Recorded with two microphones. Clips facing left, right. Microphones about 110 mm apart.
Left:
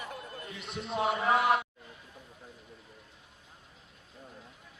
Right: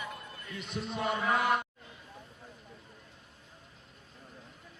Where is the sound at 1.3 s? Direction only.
Centre (ahead or behind).